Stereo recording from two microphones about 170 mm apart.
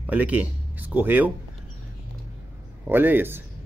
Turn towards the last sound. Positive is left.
turn(degrees=-10)  # may be behind; listen again after turning